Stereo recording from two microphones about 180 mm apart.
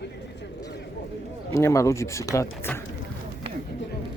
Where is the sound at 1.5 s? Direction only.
15° left (ahead or behind).